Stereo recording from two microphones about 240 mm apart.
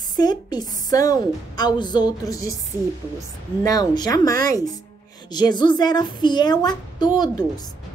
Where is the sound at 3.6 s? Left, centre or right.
Centre.